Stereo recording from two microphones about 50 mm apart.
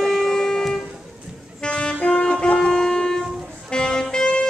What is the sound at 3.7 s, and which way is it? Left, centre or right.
Music, centre.